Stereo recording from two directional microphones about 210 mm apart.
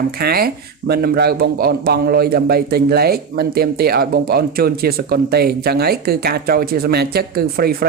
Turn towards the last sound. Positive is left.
turn(degrees=-45)  # may be behind; listen again after turning